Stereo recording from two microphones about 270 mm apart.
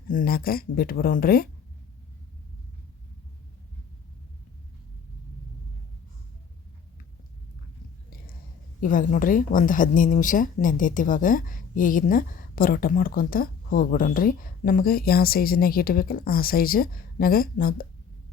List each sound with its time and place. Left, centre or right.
0.1 s speech: left
8.8 s speech: left